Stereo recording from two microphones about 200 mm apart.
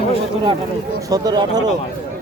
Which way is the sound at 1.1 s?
20° right (ahead or behind).